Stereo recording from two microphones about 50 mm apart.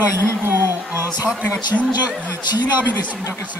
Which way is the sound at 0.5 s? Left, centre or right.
Right.